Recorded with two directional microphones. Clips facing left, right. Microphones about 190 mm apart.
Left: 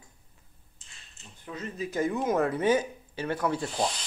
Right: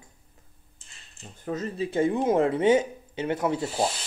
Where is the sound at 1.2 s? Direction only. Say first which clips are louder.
Right 7 dB; 45° right (ahead or behind); by 3.7 s 20° right (ahead or behind).